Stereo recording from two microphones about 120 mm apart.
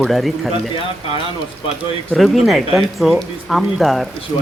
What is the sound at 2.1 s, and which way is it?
Speech, centre (ahead or behind).